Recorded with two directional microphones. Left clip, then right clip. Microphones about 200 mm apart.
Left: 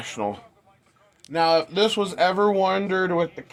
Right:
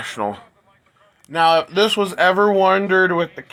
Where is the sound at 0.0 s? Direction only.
10° right (ahead or behind).